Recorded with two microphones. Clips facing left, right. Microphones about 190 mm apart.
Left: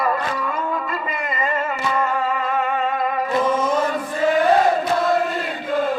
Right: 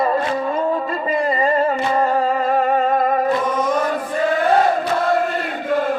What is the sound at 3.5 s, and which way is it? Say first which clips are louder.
Chant: right 1 dB; 25° left (ahead or behind).